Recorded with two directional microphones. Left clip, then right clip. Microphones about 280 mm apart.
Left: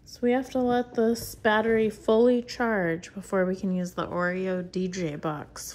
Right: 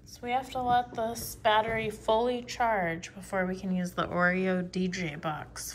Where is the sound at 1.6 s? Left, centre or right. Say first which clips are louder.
Left 8 dB; left.